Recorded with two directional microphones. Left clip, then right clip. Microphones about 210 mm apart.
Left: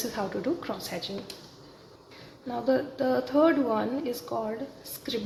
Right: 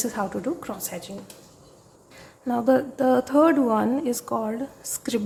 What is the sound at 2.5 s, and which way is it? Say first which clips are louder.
A woman's voice: right 6 dB; 35° right (ahead or behind).